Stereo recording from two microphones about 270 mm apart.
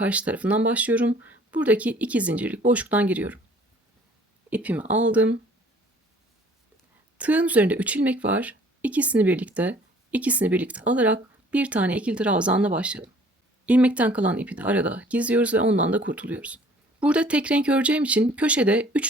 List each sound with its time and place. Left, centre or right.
0.0 s speech: centre
4.4 s speech: centre
7.2 s speech: centre